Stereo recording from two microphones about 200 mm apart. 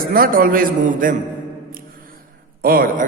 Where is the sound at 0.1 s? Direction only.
45° right (ahead or behind).